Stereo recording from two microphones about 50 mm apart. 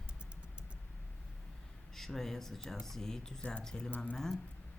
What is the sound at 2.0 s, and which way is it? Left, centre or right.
Speech, centre.